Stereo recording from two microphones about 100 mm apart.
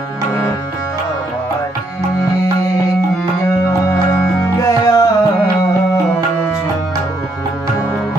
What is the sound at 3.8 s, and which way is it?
Music, 30° left (ahead or behind).